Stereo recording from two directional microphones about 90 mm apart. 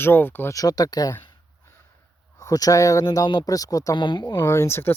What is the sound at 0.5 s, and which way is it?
Speech, 45° left (ahead or behind).